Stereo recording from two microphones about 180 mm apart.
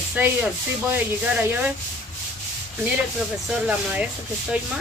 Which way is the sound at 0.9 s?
10° right (ahead or behind).